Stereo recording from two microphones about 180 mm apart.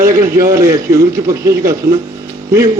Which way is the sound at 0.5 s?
15° right (ahead or behind).